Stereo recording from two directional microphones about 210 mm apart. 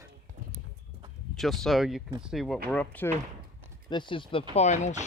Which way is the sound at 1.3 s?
Centre (ahead or behind).